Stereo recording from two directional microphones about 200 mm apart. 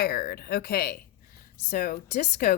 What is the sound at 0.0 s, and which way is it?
Speech, 50° left (ahead or behind).